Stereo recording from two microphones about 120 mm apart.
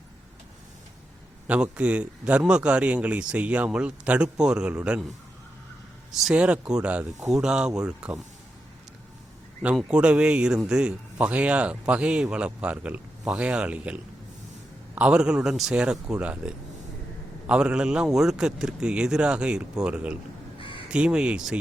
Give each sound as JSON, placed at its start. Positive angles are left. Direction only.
{"t": 1.5, "sound": "speech", "side_deg": -10}
{"t": 6.1, "sound": "speech", "side_deg": -5}
{"t": 9.9, "sound": "speech", "side_deg": -10}
{"t": 20.6, "sound": "crow", "side_deg": 45}
{"t": 20.9, "sound": "speech", "side_deg": -10}